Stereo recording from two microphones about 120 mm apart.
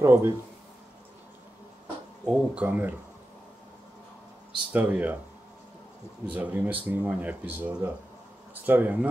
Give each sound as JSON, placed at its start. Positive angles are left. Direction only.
{"t": 0.0, "sound": "speech", "side_deg": -20}
{"t": 2.2, "sound": "speech", "side_deg": -10}
{"t": 4.7, "sound": "speech", "side_deg": -15}
{"t": 6.3, "sound": "speech", "side_deg": -15}